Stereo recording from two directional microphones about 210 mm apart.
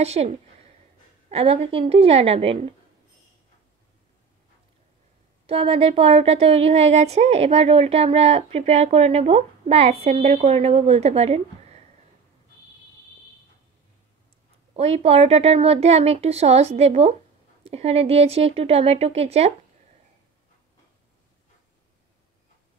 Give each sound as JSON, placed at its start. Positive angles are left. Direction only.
{"t": 0.0, "sound": "speech", "side_deg": -30}
{"t": 1.3, "sound": "speech", "side_deg": -30}
{"t": 5.5, "sound": "speech", "side_deg": -30}
{"t": 14.7, "sound": "speech", "side_deg": -30}